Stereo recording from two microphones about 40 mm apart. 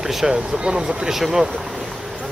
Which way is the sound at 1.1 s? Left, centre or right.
Centre.